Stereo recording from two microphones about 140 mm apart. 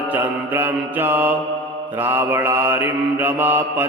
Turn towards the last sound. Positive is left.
turn(degrees=-15)  # may be behind; listen again after turning